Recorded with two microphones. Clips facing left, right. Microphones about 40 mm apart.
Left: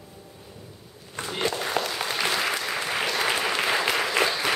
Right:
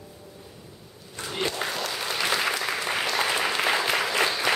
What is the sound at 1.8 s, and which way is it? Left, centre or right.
Applause, left.